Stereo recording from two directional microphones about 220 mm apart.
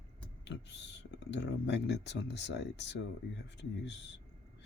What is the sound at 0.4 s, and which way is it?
Speech, 55° left (ahead or behind).